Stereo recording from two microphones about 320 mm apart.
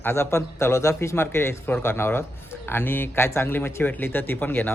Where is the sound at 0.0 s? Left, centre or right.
Centre.